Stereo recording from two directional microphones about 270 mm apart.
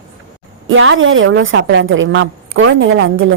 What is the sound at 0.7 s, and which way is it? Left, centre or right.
A woman's voice, right.